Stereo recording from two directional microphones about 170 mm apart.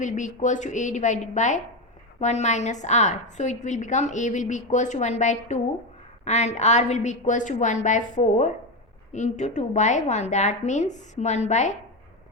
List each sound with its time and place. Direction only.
0.0 s a woman's voice: 45° left (ahead or behind)